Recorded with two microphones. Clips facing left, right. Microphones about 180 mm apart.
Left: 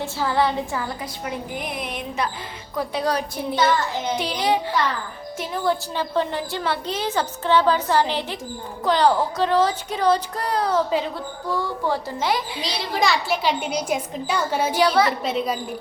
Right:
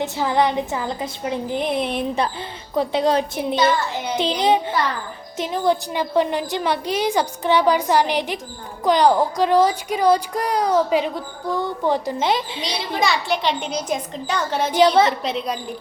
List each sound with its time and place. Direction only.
0.0 s a woman's voice: 20° right (ahead or behind)
12.9 s a child's voice: centre (ahead or behind)
14.8 s a woman's voice: 20° right (ahead or behind)
15.2 s a woman's voice: centre (ahead or behind)